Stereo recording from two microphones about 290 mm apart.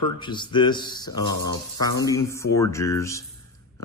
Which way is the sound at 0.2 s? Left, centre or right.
Centre.